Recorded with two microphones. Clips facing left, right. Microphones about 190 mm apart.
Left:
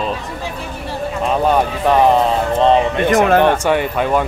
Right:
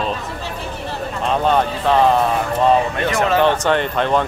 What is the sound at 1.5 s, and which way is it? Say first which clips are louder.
Speech: left 1 dB; 15° left (ahead or behind).